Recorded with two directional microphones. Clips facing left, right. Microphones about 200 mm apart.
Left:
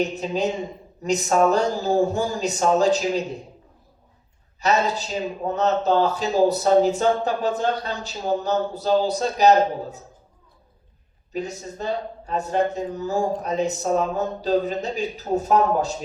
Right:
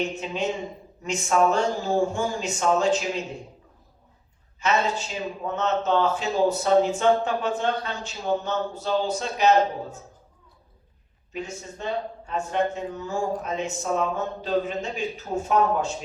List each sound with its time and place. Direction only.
0.0 s a man's voice: 40° left (ahead or behind)
4.6 s a man's voice: 40° left (ahead or behind)
11.3 s a man's voice: 40° left (ahead or behind)